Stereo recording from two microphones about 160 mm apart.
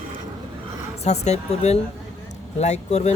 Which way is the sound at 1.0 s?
45° left (ahead or behind).